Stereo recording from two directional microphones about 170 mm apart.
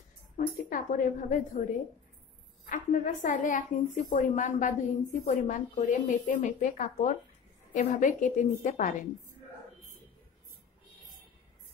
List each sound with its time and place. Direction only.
0.7 s a woman's voice: 50° left (ahead or behind)
2.7 s a woman's voice: 50° left (ahead or behind)